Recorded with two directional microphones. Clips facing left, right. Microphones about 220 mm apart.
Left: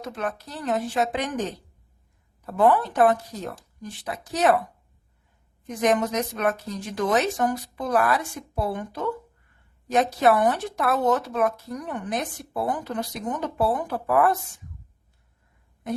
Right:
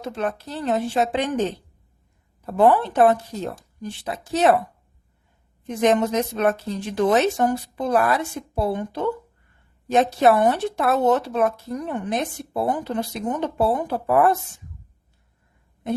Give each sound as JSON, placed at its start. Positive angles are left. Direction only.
{"t": 0.0, "sound": "speech", "side_deg": -30}
{"t": 5.6, "sound": "speech", "side_deg": -25}